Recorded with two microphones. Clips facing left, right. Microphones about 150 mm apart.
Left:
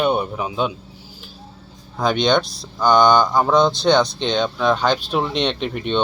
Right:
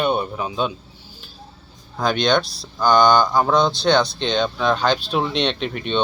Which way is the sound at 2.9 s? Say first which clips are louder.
Left 1 dB; centre (ahead or behind).